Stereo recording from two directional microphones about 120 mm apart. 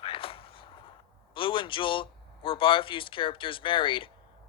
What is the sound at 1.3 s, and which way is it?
A man's voice, 45° left (ahead or behind).